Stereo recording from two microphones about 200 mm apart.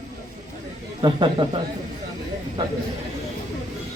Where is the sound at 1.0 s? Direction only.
20° right (ahead or behind).